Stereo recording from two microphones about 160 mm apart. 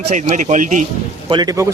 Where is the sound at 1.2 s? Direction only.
25° right (ahead or behind).